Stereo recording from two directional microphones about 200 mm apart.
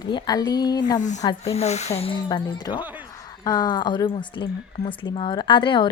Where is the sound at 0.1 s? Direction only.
20° left (ahead or behind).